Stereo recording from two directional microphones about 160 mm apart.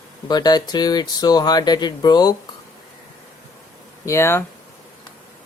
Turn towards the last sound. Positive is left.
turn(degrees=15)  # may be behind; listen again after turning